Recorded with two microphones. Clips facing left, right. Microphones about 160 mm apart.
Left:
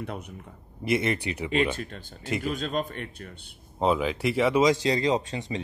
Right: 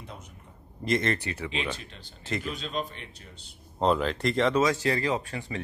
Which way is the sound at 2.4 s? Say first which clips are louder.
Left 4 dB; 50° left (ahead or behind).